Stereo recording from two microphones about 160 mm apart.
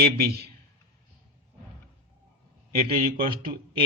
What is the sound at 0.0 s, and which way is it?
Speech, 75° right (ahead or behind).